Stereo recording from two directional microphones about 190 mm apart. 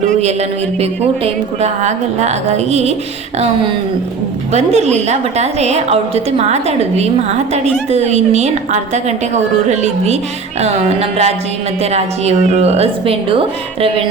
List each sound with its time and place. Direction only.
0.8 s a woman's voice: 35° right (ahead or behind)
4.5 s a woman's voice: 35° right (ahead or behind)